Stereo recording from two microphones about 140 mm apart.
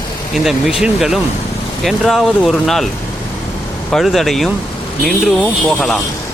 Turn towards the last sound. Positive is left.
turn(degrees=0)  # may be behind; listen again after turning